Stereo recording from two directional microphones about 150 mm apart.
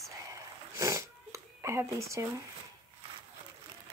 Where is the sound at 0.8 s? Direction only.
20° right (ahead or behind).